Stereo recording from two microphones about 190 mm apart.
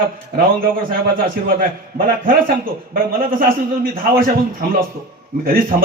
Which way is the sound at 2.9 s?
50° right (ahead or behind).